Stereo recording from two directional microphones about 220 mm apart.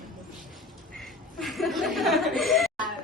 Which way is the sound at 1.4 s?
Centre (ahead or behind).